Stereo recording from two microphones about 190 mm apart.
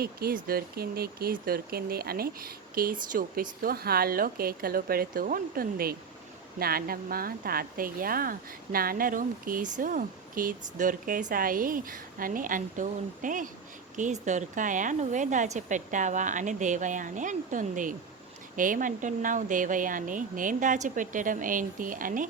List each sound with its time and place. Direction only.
0.0 s a woman's voice: 50° right (ahead or behind)